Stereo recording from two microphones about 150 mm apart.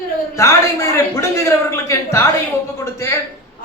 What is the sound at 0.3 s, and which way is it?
Speech, 20° left (ahead or behind).